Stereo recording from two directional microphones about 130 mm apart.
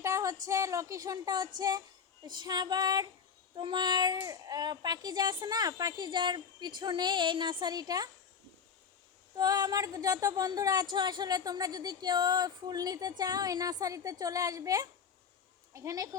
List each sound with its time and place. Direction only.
0.0 s a child's voice: 25° right (ahead or behind)
9.3 s speech: 30° right (ahead or behind)